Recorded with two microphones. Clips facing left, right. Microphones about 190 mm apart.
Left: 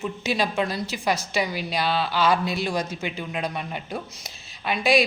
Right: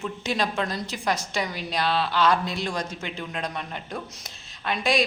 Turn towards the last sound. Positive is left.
turn(degrees=5)  # may be behind; listen again after turning